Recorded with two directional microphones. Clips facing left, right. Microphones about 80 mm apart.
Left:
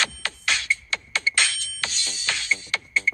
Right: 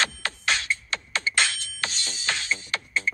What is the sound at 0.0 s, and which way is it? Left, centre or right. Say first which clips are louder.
Music: even; right.